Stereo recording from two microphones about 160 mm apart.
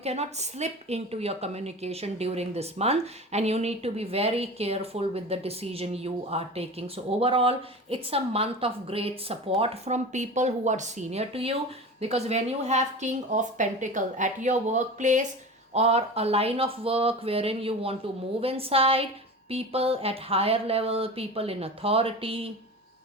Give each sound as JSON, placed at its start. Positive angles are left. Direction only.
{"t": 0.0, "sound": "a woman's voice", "side_deg": -40}